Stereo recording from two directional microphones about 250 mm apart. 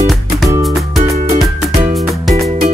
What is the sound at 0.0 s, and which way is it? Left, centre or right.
Music, centre.